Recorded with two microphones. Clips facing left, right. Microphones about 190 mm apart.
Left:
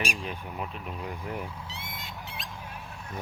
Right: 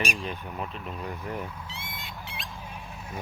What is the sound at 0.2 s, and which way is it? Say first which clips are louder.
Speech: right 1 dB; 5° left (ahead or behind).